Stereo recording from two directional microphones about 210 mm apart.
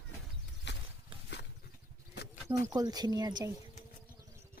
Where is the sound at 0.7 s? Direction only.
55° left (ahead or behind).